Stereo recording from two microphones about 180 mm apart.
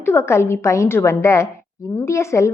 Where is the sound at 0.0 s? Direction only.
15° left (ahead or behind).